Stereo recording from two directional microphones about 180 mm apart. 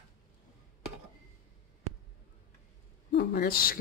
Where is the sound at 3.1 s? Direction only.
55° left (ahead or behind).